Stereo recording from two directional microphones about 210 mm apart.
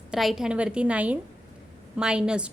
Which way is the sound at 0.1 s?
Centre (ahead or behind).